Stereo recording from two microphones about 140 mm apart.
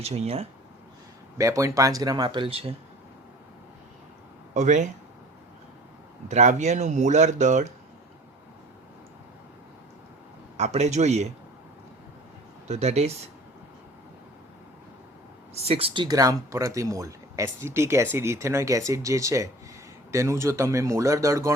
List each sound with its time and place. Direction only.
0.0 s speech: 50° right (ahead or behind)
1.4 s speech: 25° right (ahead or behind); by 2.7 s 45° right (ahead or behind)
4.5 s speech: 60° right (ahead or behind)
6.2 s speech: 60° right (ahead or behind)
10.6 s speech: 50° right (ahead or behind)
12.6 s speech: 50° right (ahead or behind)
15.5 s speech: 45° right (ahead or behind); by 21.5 s 20° right (ahead or behind)